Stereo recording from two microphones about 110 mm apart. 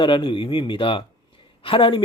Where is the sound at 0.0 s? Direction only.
50° left (ahead or behind).